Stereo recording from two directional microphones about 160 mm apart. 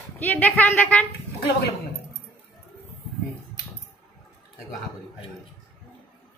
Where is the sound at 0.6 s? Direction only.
10° left (ahead or behind).